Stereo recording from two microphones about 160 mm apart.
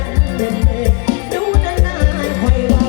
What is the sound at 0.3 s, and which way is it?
Music, 25° right (ahead or behind).